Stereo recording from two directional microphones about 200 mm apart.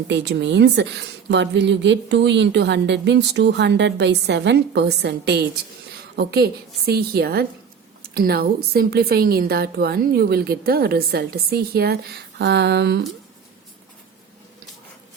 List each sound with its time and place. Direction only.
0.1 s a woman's voice: 60° right (ahead or behind)